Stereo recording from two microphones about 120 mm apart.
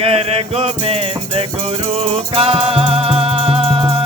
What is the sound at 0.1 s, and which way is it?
Music, 55° right (ahead or behind).